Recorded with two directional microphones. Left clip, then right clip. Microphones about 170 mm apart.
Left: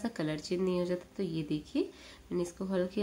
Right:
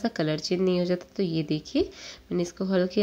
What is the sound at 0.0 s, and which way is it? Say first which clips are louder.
Speech: right 8 dB; 30° right (ahead or behind).